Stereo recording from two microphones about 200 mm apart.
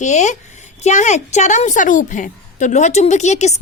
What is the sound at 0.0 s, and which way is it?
A woman's voice, 35° left (ahead or behind).